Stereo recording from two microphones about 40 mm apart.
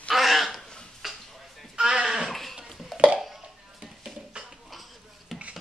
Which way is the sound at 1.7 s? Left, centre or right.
Centre.